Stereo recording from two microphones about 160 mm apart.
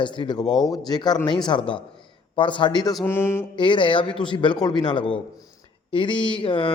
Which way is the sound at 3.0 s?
15° left (ahead or behind).